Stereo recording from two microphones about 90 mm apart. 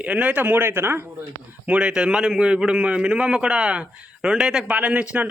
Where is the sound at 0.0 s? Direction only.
15° right (ahead or behind).